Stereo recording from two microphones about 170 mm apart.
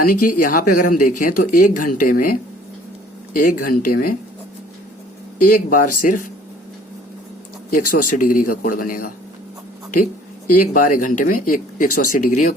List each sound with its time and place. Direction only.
0.1 s speech: 55° left (ahead or behind)
3.6 s speech: 55° left (ahead or behind)
5.4 s speech: 55° left (ahead or behind)
7.7 s speech: 55° left (ahead or behind)